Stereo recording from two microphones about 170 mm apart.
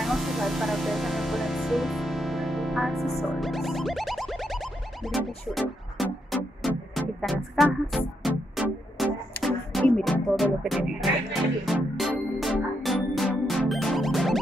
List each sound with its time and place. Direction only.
0.0 s music: centre (ahead or behind)